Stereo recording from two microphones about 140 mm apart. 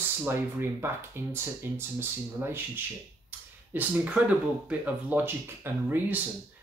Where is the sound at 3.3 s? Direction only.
10° right (ahead or behind).